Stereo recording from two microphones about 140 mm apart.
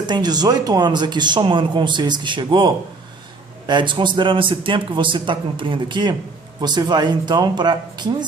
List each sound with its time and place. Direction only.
0.1 s speech: 30° right (ahead or behind)